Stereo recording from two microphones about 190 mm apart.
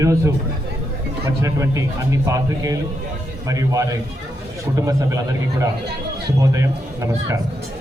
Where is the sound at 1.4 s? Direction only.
15° right (ahead or behind).